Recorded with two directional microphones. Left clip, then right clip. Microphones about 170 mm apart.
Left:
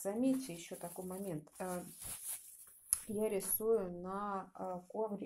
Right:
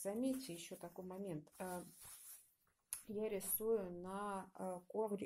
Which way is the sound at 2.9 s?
Centre (ahead or behind).